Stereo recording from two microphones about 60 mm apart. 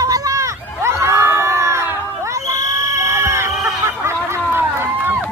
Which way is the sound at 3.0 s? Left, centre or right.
Right.